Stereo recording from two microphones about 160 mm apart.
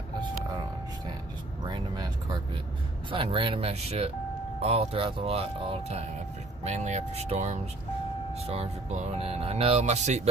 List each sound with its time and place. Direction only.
1.7 s vehicle: 25° right (ahead or behind)
3.1 s speech: 35° right (ahead or behind)